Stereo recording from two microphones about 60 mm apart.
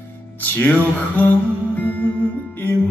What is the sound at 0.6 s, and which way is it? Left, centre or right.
Music, left.